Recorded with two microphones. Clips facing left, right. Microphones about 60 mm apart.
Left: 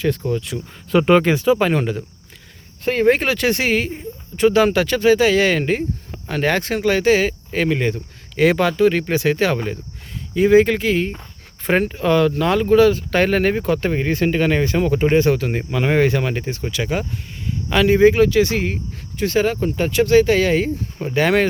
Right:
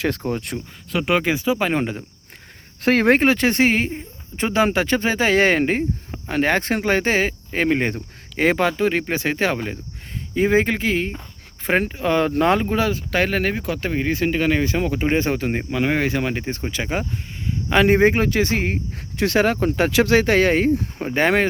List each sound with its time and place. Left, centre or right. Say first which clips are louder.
0.3 s speech: left 2 dB; right
0.9 s speech: left 6 dB; centre
2.8 s speech: right 1 dB; right
3.2 s speech: right 2 dB; right
6.1 s a sound: left 1 dB; centre
6.6 s speech: left 1 dB; right; by 12.1 s centre
12.3 s speech: right 1 dB; right
12.6 s speech: left 8 dB; centre
15.2 s speech: left 4 dB; centre
15.8 s speech: left 4 dB; centre
16.6 s speech: left 3 dB; right
17.7 s speech: left 3 dB; right
19.1 s speech: even; right
21.1 s speech: left 1 dB; right